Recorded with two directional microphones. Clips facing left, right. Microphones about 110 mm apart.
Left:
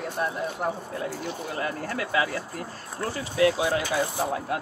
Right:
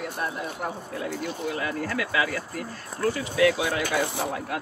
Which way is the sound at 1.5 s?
35° left (ahead or behind).